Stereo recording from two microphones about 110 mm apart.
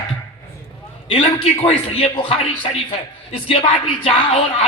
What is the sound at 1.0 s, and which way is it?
A man's voice, 55° left (ahead or behind).